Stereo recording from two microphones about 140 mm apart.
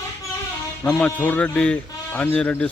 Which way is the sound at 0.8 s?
10° left (ahead or behind).